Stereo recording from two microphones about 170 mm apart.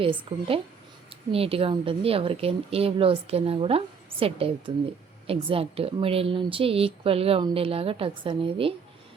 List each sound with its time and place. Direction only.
0.0 s speech: 30° right (ahead or behind)